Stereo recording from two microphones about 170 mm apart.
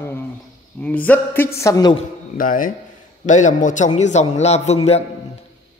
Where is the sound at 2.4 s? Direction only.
55° left (ahead or behind).